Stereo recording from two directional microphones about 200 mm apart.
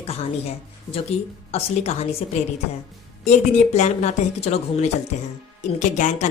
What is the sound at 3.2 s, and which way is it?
A woman's voice, 35° left (ahead or behind).